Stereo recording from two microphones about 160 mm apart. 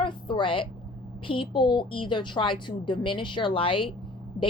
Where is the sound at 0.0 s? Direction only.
30° left (ahead or behind).